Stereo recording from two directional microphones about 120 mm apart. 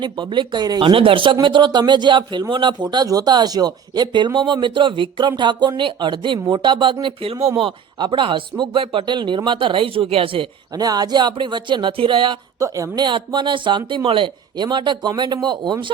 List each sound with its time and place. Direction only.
0.0 s speech: 40° right (ahead or behind)
0.8 s speech: 45° right (ahead or behind)
10.8 s speech: 35° right (ahead or behind)
12.5 s a woman's voice: 25° right (ahead or behind)
13.1 s speech: 40° right (ahead or behind)